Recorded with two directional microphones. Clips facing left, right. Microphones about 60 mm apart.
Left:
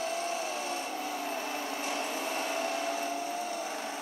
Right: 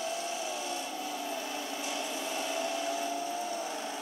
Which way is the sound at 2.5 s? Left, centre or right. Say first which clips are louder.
Left 1 dB; left.